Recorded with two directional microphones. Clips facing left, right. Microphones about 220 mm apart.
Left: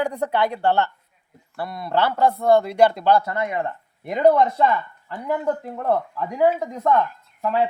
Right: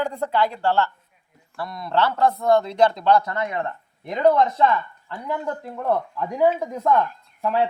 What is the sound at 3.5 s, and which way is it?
Speech, 10° left (ahead or behind).